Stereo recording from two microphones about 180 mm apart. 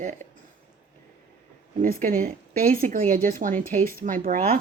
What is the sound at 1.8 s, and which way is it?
A woman's voice, 50° right (ahead or behind).